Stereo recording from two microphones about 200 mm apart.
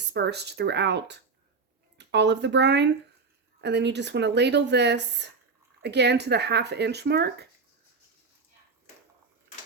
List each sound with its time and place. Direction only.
0.1 s speech: 55° right (ahead or behind)